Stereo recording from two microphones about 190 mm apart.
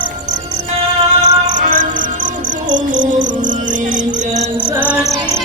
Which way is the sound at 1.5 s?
40° right (ahead or behind).